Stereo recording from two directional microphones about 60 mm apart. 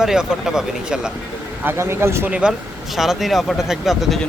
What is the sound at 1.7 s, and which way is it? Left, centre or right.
Speech, right.